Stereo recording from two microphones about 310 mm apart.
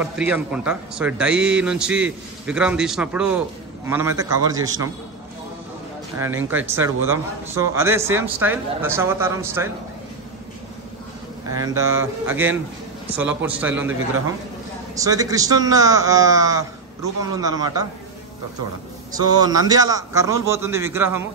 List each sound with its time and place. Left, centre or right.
0.0 s a man's voice: centre
6.1 s speech: centre
11.5 s a man's voice: centre
15.0 s speech: centre
19.1 s speech: centre